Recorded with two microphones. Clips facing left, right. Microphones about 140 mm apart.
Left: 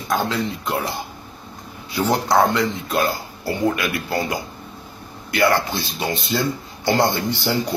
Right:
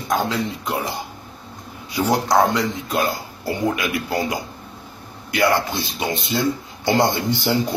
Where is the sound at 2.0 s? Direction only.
10° right (ahead or behind).